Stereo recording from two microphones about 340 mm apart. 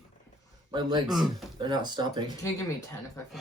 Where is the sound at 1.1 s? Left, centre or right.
Centre.